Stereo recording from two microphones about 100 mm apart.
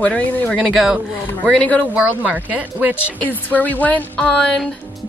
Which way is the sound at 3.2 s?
15° left (ahead or behind).